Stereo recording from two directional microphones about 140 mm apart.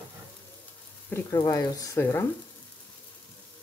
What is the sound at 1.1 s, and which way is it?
Speech, 25° left (ahead or behind).